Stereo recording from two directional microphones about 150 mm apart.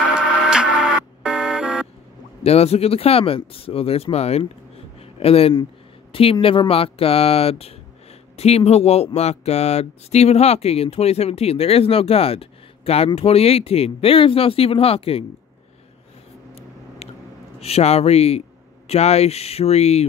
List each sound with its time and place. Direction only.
0.1 s music: 5° right (ahead or behind)
2.4 s speech: 45° left (ahead or behind)
5.0 s a sound: 40° left (ahead or behind)
6.3 s speech: 35° left (ahead or behind)
17.0 s a sound: 45° left (ahead or behind)
17.6 s speech: 45° left (ahead or behind)